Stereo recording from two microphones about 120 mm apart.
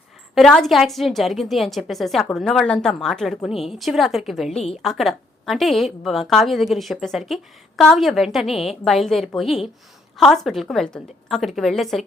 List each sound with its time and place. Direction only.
0.3 s a woman's voice: 5° left (ahead or behind)
4.5 s a woman's voice: 60° left (ahead or behind)
4.8 s a woman's voice: centre (ahead or behind)